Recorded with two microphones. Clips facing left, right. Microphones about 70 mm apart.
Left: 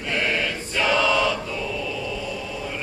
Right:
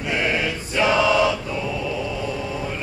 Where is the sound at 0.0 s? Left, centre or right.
Centre.